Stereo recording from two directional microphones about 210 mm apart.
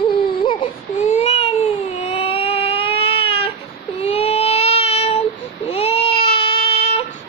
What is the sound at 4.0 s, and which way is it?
Child singing, 30° left (ahead or behind).